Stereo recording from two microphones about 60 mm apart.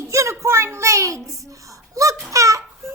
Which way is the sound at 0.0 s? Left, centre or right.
Right.